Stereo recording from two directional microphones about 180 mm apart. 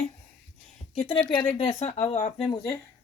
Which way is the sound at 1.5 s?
35° left (ahead or behind).